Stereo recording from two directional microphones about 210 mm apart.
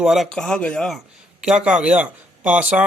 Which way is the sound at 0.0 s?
Centre (ahead or behind).